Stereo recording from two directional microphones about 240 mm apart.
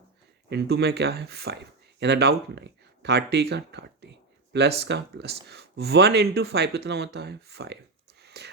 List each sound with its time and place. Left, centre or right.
0.5 s speech: right
8.2 s whispering: right